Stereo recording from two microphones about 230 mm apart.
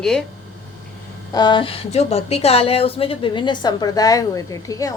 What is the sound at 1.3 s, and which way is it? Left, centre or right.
Speech, centre.